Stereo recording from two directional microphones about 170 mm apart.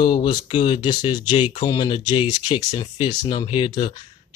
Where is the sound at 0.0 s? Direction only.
25° left (ahead or behind).